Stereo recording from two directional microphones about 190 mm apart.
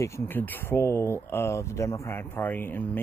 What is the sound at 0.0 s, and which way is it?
Speech, 15° left (ahead or behind).